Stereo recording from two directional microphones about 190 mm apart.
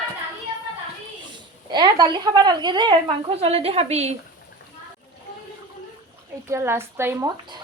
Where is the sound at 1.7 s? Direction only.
25° right (ahead or behind).